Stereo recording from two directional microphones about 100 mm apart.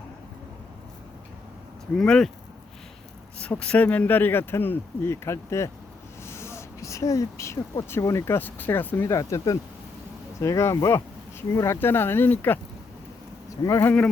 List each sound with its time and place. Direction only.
2.0 s speech: 5° left (ahead or behind)
3.4 s speech: 10° left (ahead or behind)
9.0 s speech: 30° left (ahead or behind)
13.7 s speech: 30° left (ahead or behind)